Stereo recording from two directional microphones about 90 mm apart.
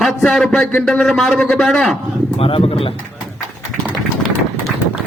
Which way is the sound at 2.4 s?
90° left.